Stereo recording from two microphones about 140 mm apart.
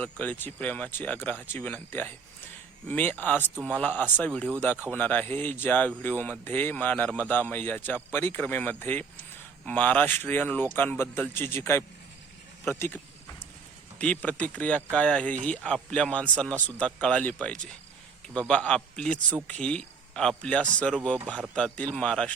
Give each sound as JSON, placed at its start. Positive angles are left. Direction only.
{"t": 0.0, "sound": "speech", "side_deg": 10}
{"t": 14.0, "sound": "speech", "side_deg": 10}